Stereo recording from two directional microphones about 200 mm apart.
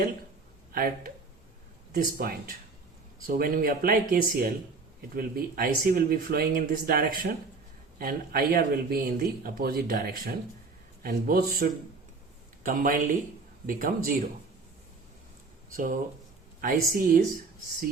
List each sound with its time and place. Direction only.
0.7 s speech: 50° right (ahead or behind)
15.7 s speech: 45° right (ahead or behind)